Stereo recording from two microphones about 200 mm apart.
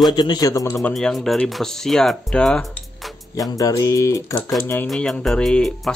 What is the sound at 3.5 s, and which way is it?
Mantra, 15° left (ahead or behind).